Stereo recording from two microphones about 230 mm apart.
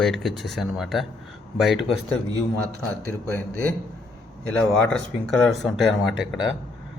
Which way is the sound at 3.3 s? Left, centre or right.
Centre.